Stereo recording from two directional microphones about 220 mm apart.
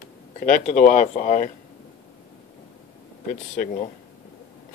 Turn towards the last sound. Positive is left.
turn(degrees=30)  # may be behind; listen again after turning